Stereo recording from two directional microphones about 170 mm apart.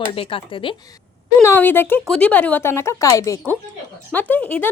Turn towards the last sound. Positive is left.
turn(degrees=10)  # may be behind; listen again after turning